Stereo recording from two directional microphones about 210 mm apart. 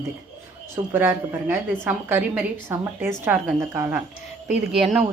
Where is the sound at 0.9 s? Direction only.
10° right (ahead or behind).